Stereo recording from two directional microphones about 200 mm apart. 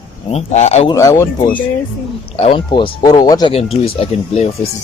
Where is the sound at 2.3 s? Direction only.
25° left (ahead or behind).